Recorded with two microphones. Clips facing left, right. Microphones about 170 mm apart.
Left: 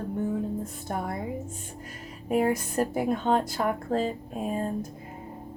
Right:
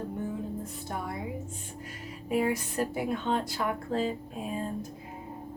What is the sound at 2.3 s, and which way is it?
A woman's voice, 45° left (ahead or behind).